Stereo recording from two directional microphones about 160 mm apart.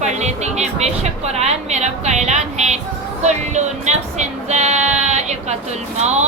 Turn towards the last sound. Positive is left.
turn(degrees=-45)  # may be behind; listen again after turning